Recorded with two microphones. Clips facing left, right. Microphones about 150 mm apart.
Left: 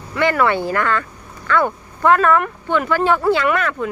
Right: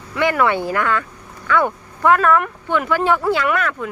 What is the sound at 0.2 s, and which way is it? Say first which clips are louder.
Speech: left 1 dB; 10° right (ahead or behind).